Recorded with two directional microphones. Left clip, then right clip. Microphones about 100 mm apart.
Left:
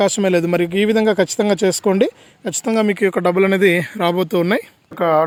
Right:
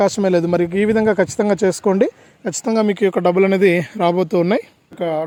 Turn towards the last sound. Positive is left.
turn(degrees=0)  # may be behind; listen again after turning